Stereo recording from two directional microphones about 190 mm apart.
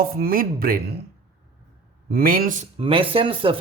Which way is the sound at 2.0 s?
50° right (ahead or behind).